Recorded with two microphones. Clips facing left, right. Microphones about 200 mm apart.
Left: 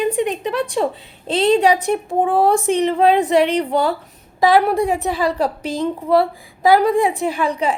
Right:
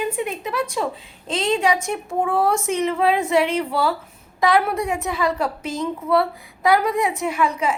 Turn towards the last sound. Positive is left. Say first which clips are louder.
# left 2 dB
turn(degrees=35)  # may be behind; listen again after turning